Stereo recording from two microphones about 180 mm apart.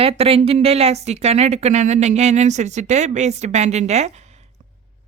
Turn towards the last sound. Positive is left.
turn(degrees=-40)  # may be behind; listen again after turning